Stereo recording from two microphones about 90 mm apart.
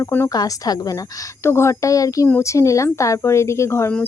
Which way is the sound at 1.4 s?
30° left (ahead or behind).